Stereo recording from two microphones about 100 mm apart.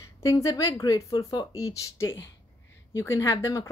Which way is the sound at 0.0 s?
30° left (ahead or behind).